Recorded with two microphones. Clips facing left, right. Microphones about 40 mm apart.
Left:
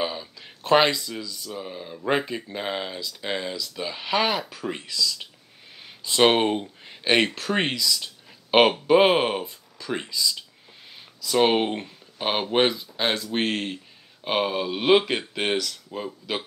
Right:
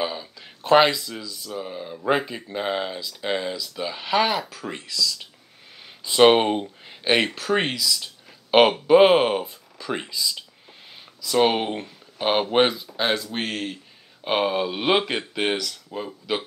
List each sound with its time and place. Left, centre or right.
0.0 s speech: centre
6.0 s speech: centre
11.2 s speech: centre
12.2 s speech: centre
13.4 s speech: left
14.2 s speech: centre